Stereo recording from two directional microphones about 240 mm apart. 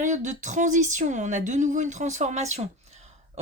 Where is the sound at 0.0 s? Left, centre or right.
Right.